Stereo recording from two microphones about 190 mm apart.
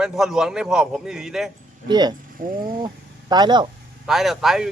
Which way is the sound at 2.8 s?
20° right (ahead or behind).